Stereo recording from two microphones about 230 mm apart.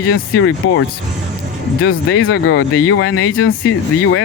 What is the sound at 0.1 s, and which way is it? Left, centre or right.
Speech, left.